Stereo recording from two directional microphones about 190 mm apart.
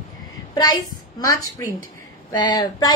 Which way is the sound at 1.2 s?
15° left (ahead or behind).